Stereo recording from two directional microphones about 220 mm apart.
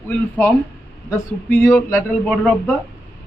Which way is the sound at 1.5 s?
10° left (ahead or behind).